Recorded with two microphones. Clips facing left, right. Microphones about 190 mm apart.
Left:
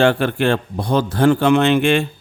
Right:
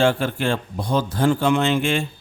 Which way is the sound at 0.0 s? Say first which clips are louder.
Left 4 dB; 65° left (ahead or behind).